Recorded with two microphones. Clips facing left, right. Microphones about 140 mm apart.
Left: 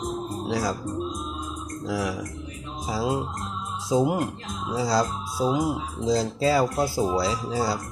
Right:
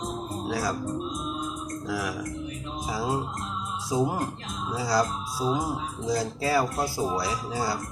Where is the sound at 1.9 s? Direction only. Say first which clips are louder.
Left 4 dB; 25° left (ahead or behind).